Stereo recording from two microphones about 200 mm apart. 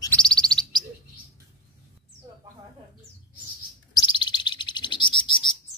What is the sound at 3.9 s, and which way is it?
Chirp, 25° left (ahead or behind).